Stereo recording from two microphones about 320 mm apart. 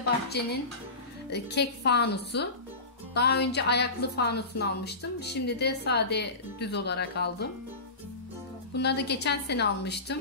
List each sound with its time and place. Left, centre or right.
0.3 s a woman's voice: left
8.7 s a woman's voice: left